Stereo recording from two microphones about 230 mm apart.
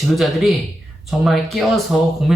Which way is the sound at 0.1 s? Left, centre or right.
Centre.